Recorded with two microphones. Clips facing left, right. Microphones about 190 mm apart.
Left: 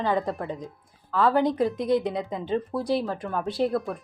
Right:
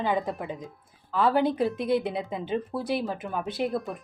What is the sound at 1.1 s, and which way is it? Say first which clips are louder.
Speech: left 1 dB; 25° right (ahead or behind).